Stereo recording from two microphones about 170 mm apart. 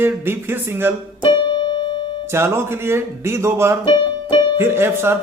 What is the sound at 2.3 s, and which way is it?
Speech, 15° right (ahead or behind).